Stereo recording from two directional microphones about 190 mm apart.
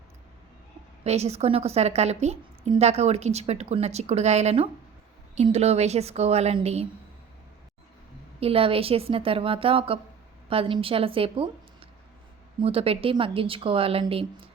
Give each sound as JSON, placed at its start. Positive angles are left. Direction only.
{"t": 1.0, "sound": "a woman's voice", "side_deg": -35}
{"t": 8.4, "sound": "speech", "side_deg": -30}
{"t": 12.5, "sound": "speech", "side_deg": -30}